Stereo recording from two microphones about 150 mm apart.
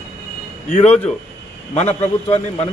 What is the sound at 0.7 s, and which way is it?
Speech, 45° left (ahead or behind).